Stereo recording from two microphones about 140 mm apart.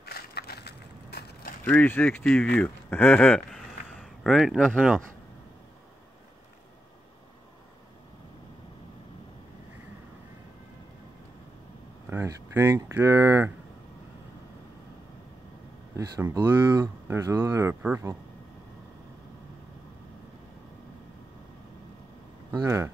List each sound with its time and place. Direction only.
0.2 s crushing: 90° left
1.6 s speech: 10° left (ahead or behind)
12.1 s speech: 15° right (ahead or behind)
16.4 s speech: 15° right (ahead or behind)
22.5 s speech: 20° right (ahead or behind)